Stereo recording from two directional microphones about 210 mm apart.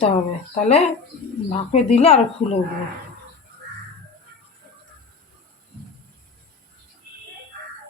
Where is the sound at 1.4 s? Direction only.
35° left (ahead or behind).